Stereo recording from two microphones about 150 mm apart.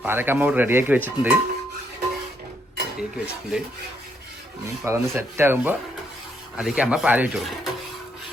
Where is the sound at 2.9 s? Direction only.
5° right (ahead or behind).